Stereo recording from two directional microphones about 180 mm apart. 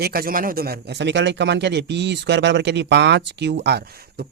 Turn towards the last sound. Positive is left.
turn(degrees=-60)  # may be behind; listen again after turning